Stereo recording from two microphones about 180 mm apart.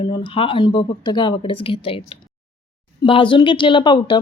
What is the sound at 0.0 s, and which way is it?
Speech, 25° left (ahead or behind).